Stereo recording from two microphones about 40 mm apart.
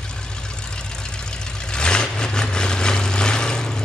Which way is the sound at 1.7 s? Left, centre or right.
Left.